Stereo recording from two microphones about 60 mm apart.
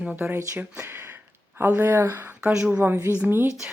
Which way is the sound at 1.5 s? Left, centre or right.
Right.